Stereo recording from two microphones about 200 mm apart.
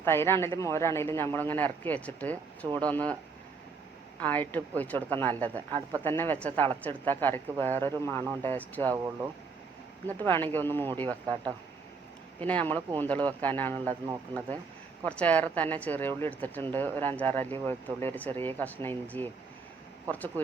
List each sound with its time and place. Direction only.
0.0 s speech: 10° left (ahead or behind)
4.2 s speech: 10° left (ahead or behind)
10.2 s speech: 10° left (ahead or behind)
12.4 s speech: 5° left (ahead or behind)
15.0 s speech: 5° left (ahead or behind)